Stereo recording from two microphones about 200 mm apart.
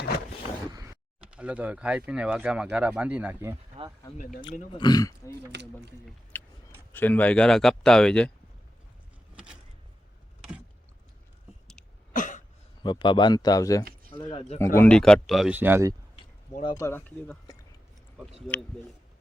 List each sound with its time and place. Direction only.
0.7 s creak: 15° right (ahead or behind)
1.3 s speech: 5° right (ahead or behind)
4.7 s speech: 20° left (ahead or behind)
5.5 s speech: 60° right (ahead or behind)
6.3 s a sound: 10° left (ahead or behind)
6.9 s speech: 10° left (ahead or behind)
9.3 s a sound: 5° right (ahead or behind)
12.1 s cough: 40° left (ahead or behind)
12.8 s speech: 25° left (ahead or behind)
14.2 s speech: 30° left (ahead or behind)
14.8 s speech: 5° left (ahead or behind); by 16.0 s 15° right (ahead or behind)
16.6 s speech: 15° left (ahead or behind)